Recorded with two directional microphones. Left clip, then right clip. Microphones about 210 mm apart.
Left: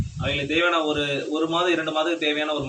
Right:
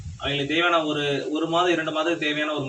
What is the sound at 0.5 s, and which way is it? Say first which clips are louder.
A man's voice: even; 15° left (ahead or behind).